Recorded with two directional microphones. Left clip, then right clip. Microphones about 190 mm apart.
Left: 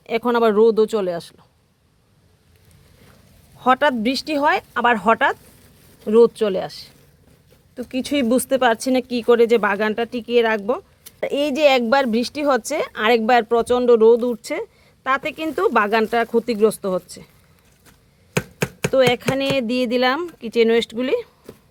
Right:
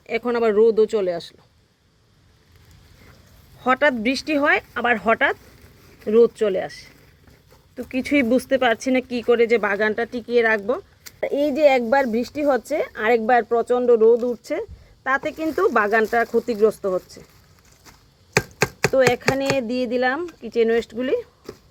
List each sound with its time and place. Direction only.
0.0 s speech: 20° left (ahead or behind)
3.6 s speech: 15° left (ahead or behind)
10.3 s speech: 90° left
10.7 s a sound: 10° left (ahead or behind)
11.2 s speech: 20° left (ahead or behind)
18.9 s speech: 35° left (ahead or behind)
19.6 s speech: 50° left (ahead or behind)